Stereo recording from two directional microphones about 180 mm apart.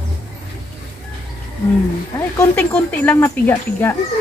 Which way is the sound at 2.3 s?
10° left (ahead or behind).